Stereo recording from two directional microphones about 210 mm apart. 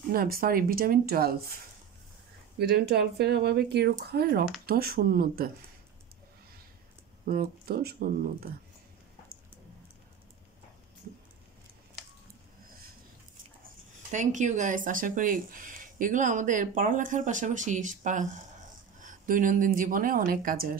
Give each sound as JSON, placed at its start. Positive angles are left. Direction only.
{"t": 0.1, "sound": "speech", "side_deg": -45}
{"t": 2.6, "sound": "speech", "side_deg": -50}
{"t": 7.2, "sound": "speech", "side_deg": -45}
{"t": 14.1, "sound": "speech", "side_deg": -35}